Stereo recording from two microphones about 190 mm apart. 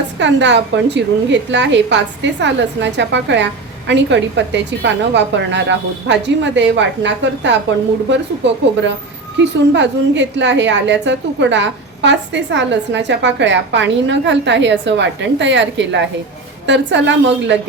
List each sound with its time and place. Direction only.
0.2 s a woman's voice: 70° right (ahead or behind)